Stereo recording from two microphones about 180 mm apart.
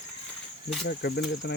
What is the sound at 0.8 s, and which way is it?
Speech, 70° left (ahead or behind).